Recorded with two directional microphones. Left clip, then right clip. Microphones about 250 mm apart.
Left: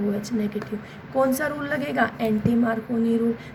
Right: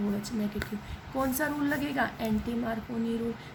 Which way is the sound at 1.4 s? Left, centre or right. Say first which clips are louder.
Left 4 dB; centre.